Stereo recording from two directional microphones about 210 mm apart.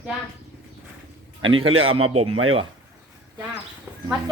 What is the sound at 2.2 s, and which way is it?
Speech, 85° right.